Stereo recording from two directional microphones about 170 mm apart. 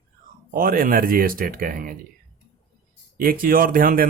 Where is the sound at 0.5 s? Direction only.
55° right (ahead or behind).